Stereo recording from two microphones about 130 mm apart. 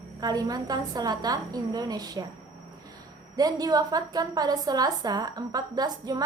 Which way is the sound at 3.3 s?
30° right (ahead or behind).